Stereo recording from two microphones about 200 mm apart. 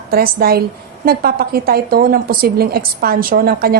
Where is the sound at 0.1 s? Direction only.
50° right (ahead or behind).